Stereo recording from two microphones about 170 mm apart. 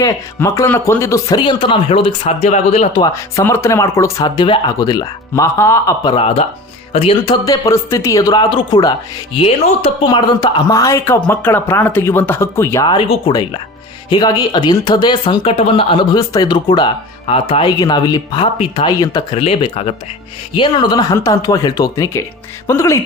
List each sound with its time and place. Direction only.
0.0 s speech: 15° left (ahead or behind); by 2.9 s 40° left (ahead or behind)
2.9 s speech: 25° left (ahead or behind)
6.9 s speech: 35° left (ahead or behind)
10.1 s speech: 25° left (ahead or behind)
18.4 s speech: 35° left (ahead or behind)
19.4 s speech: 35° left (ahead or behind)
20.6 s speech: 25° left (ahead or behind)